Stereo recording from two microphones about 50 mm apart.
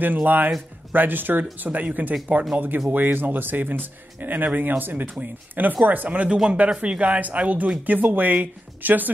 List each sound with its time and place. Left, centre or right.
0.0 s speech: right
6.3 s speech: centre; by 9.1 s right